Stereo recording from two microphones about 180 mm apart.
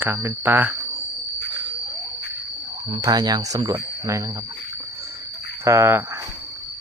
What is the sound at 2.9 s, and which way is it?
Speech, 25° right (ahead or behind).